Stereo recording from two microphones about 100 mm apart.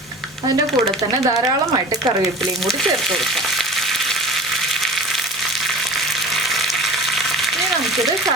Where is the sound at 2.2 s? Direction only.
Centre (ahead or behind).